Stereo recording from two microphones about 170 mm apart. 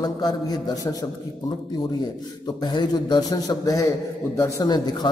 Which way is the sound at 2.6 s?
25° left (ahead or behind).